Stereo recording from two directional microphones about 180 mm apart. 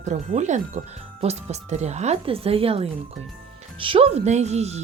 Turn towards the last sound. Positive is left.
turn(degrees=-35)  # may be behind; listen again after turning